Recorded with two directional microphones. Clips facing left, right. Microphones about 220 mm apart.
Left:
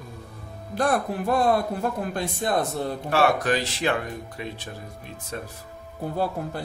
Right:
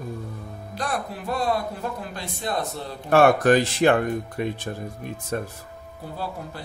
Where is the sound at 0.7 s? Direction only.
50° left (ahead or behind).